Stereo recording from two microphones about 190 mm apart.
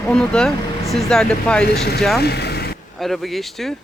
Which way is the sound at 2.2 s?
60° left (ahead or behind).